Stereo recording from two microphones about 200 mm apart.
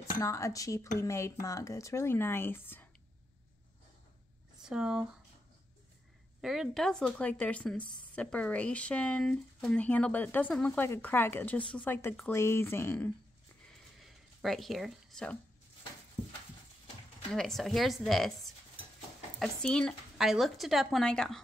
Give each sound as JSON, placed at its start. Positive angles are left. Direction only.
{"t": 0.0, "sound": "speech", "side_deg": 15}
{"t": 4.6, "sound": "speech", "side_deg": -5}
{"t": 6.4, "sound": "speech", "side_deg": 0}
{"t": 13.9, "sound": "a sound", "side_deg": 0}
{"t": 16.2, "sound": "a sound", "side_deg": 30}
{"t": 17.3, "sound": "speech", "side_deg": 0}